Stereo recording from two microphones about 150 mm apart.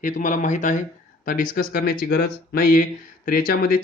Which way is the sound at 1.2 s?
65° left (ahead or behind).